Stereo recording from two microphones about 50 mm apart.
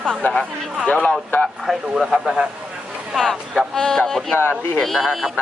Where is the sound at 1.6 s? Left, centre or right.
Centre.